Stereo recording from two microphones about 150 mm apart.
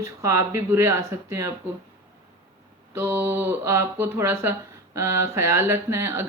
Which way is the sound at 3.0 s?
15° right (ahead or behind).